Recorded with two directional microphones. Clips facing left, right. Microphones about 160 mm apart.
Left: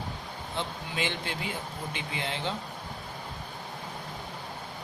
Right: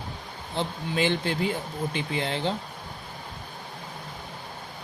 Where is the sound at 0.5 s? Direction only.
35° right (ahead or behind).